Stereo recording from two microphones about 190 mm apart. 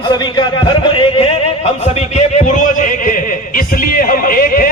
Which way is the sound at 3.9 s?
50° left (ahead or behind).